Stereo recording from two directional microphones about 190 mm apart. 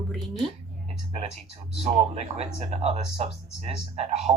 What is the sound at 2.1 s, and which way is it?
Speech, 35° right (ahead or behind).